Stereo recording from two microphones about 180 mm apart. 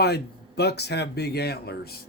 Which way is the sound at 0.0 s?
65° left (ahead or behind).